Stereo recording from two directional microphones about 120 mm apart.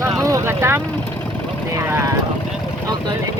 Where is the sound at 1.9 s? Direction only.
20° right (ahead or behind).